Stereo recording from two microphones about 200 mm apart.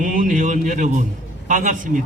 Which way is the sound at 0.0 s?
40° right (ahead or behind).